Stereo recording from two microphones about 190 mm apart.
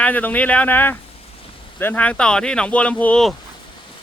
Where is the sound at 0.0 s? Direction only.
10° left (ahead or behind).